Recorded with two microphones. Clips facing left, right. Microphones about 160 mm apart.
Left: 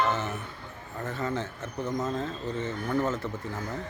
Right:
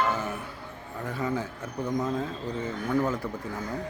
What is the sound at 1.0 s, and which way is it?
Speech, 10° right (ahead or behind).